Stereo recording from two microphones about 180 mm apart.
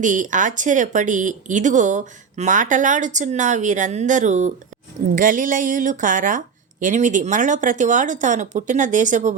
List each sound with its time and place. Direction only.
0.0 s speech: 45° right (ahead or behind)